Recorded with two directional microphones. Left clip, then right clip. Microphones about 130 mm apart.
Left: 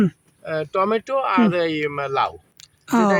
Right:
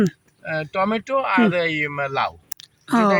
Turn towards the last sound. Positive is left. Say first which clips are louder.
# even
turn(degrees=15)  # may be behind; listen again after turning